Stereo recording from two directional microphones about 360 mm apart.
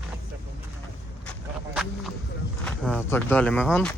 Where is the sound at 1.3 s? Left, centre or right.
Centre.